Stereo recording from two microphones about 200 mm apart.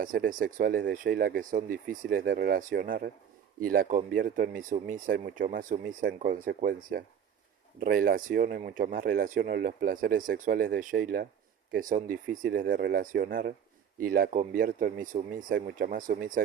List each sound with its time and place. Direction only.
0.0 s speech: 45° right (ahead or behind)